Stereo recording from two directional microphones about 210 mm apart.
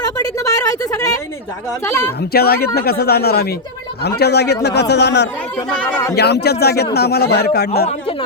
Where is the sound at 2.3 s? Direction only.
45° left (ahead or behind).